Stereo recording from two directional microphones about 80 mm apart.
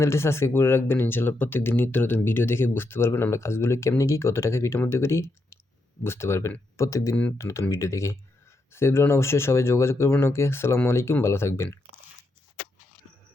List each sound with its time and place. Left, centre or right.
0.0 s speech: left